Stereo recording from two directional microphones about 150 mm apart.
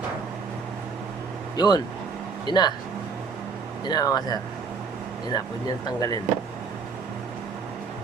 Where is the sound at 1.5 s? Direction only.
25° left (ahead or behind).